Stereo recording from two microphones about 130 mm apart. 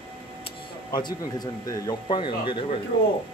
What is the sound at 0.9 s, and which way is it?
Speech, 35° left (ahead or behind).